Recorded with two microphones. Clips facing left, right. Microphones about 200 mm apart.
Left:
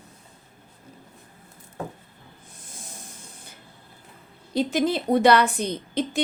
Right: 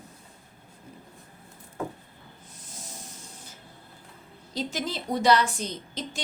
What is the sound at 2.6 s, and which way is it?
Snake, 55° left (ahead or behind).